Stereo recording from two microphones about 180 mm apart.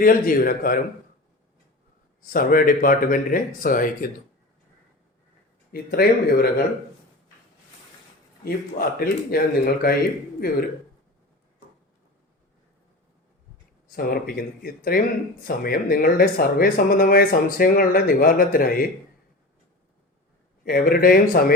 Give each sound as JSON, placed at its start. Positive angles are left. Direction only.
{"t": 0.0, "sound": "speech", "side_deg": 50}
{"t": 2.2, "sound": "speech", "side_deg": 50}
{"t": 5.7, "sound": "speech", "side_deg": 55}
{"t": 8.4, "sound": "speech", "side_deg": 55}
{"t": 13.8, "sound": "speech", "side_deg": 55}
{"t": 20.7, "sound": "speech", "side_deg": 55}